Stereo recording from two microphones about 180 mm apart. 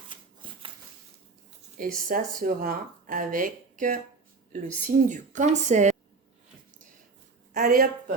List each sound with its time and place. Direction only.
0.4 s a sound: 25° right (ahead or behind)
2.0 s speech: 50° right (ahead or behind)
7.5 s speech: 50° right (ahead or behind)